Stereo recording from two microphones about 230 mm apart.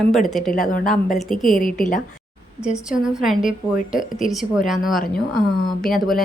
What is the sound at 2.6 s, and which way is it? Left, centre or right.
A woman's voice, centre.